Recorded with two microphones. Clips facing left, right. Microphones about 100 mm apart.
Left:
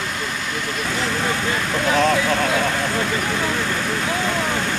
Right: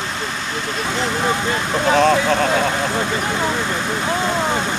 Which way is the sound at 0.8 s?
20° right (ahead or behind).